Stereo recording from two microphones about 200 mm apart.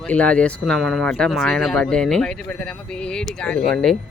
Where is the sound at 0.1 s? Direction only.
5° left (ahead or behind).